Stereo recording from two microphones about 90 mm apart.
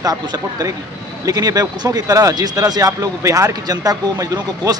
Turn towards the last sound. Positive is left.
turn(degrees=-40)  # may be behind; listen again after turning